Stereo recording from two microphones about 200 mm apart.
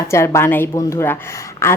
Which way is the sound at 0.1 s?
15° left (ahead or behind).